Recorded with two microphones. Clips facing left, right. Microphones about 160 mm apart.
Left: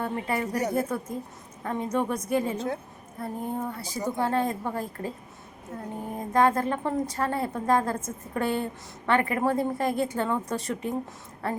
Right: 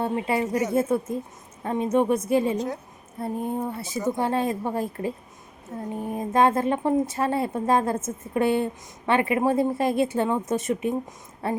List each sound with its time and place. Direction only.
0.2 s a woman's voice: 25° right (ahead or behind)